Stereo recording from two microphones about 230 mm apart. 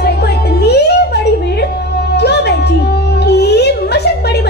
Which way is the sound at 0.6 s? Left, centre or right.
Left.